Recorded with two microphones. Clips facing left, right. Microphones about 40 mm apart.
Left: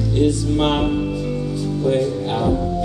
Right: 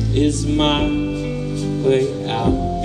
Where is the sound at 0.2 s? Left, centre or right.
Right.